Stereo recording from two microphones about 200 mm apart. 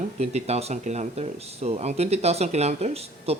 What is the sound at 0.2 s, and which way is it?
Speech, 30° right (ahead or behind).